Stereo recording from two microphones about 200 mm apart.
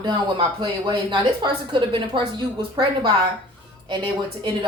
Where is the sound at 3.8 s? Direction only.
25° right (ahead or behind).